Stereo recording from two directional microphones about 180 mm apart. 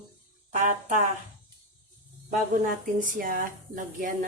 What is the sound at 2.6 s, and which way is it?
A woman's voice, 45° right (ahead or behind).